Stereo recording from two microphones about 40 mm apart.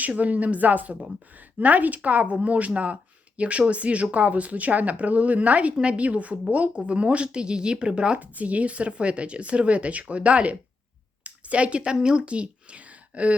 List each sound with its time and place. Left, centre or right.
0.1 s speech: right
8.2 s speech: right